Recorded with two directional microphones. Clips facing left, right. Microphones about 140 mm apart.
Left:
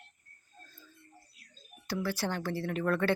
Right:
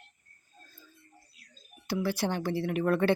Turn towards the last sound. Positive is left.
turn(degrees=-20)  # may be behind; listen again after turning